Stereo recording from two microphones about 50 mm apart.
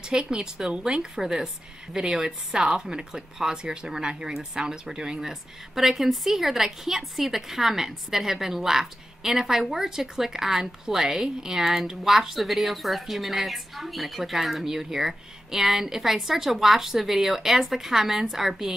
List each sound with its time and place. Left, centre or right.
0.0 s a woman's voice: centre